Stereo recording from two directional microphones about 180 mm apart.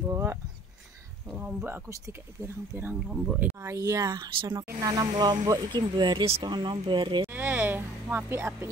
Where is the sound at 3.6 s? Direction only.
15° right (ahead or behind).